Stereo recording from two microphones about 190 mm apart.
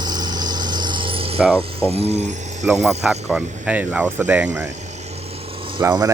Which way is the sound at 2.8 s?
5° right (ahead or behind).